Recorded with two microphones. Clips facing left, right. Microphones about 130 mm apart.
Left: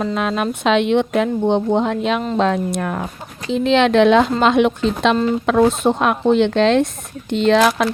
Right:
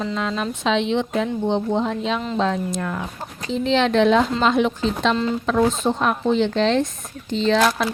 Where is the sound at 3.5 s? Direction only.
65° left (ahead or behind).